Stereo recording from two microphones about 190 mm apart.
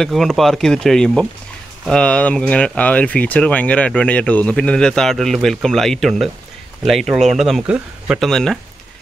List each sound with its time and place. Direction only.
0.0 s speech: centre (ahead or behind)